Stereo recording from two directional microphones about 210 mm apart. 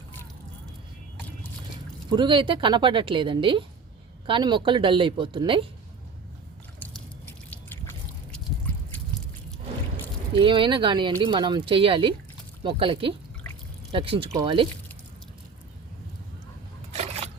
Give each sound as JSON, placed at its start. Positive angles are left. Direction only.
{"t": 2.0, "sound": "speech", "side_deg": -20}
{"t": 7.5, "sound": "trickle", "side_deg": 10}
{"t": 10.3, "sound": "speech", "side_deg": -25}
{"t": 16.9, "sound": "a sound", "side_deg": -30}